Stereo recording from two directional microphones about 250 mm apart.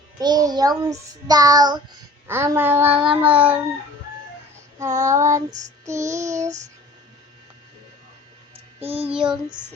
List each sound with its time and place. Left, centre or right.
0.2 s child singing: centre
4.9 s child singing: right
5.1 s child singing: centre
5.5 s child singing: right
8.5 s child singing: right
9.0 s child singing: centre